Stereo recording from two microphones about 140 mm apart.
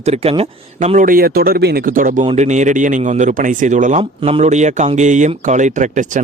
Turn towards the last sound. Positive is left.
turn(degrees=-65)  # may be behind; listen again after turning